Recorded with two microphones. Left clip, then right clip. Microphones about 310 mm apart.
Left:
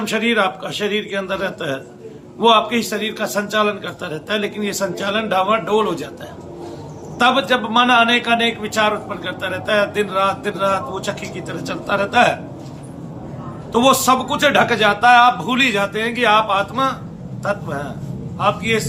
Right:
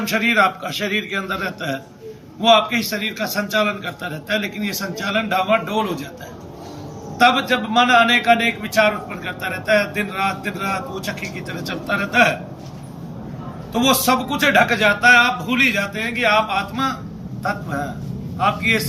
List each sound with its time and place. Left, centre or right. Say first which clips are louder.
0.1 s a man's voice: right 1 dB; centre
7.2 s a man's voice: even; centre
13.7 s a man's voice: left 3 dB; centre
18.3 s a man's voice: even; centre